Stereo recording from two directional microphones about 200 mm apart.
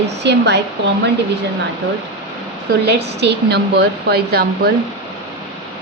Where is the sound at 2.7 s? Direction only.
55° right (ahead or behind).